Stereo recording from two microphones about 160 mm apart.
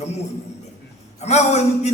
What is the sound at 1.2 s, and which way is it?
Speech, 45° left (ahead or behind).